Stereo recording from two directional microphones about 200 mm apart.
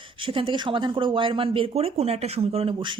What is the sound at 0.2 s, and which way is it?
Speech, 25° right (ahead or behind).